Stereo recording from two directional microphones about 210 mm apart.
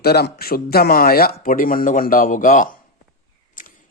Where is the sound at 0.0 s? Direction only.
50° left (ahead or behind).